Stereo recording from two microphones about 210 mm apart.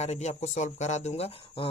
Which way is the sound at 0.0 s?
30° left (ahead or behind).